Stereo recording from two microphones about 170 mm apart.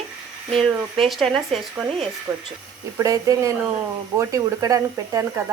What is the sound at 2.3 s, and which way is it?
A woman's voice, 10° right (ahead or behind).